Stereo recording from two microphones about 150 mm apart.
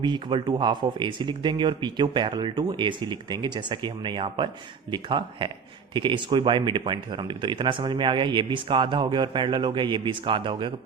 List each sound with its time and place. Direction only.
0.0 s speech: 35° right (ahead or behind)